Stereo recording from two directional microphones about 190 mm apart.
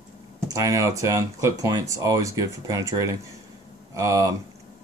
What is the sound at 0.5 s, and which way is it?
Speech, 15° right (ahead or behind).